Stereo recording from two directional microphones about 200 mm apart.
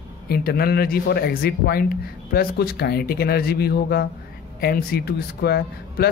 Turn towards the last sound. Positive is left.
turn(degrees=50)  # may be behind; listen again after turning